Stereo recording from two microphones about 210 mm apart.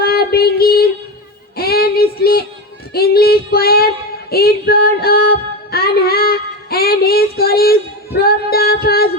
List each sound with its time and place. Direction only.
0.0 s child singing: 45° left (ahead or behind)
2.9 s female singing: 45° left (ahead or behind)
5.7 s a sound: 45° left (ahead or behind)
8.2 s female singing: 45° left (ahead or behind)